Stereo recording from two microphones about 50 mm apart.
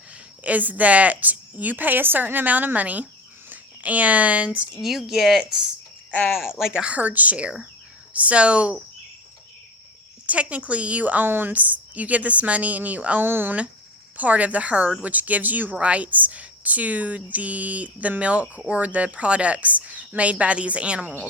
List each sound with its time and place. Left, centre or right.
0.4 s speech: right
4.8 s speech: centre
6.8 s a woman's voice: right
10.2 s a woman's voice: right
13.2 s speech: right
14.2 s a woman's voice: right